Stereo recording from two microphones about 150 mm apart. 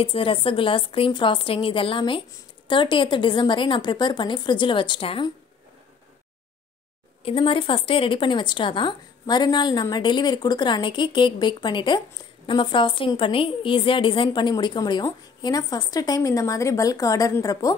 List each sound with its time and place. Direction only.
0.0 s a woman's voice: 35° left (ahead or behind)
7.2 s a woman's voice: 35° left (ahead or behind)